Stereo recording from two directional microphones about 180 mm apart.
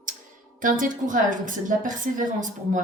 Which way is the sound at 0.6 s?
50° right (ahead or behind).